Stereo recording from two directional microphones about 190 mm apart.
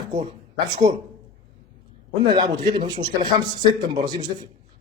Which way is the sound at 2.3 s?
25° right (ahead or behind).